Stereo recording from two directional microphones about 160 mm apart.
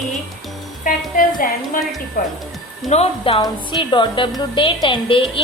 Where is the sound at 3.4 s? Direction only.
25° left (ahead or behind).